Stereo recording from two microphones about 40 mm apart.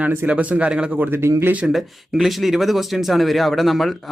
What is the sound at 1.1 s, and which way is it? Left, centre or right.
Speech, right.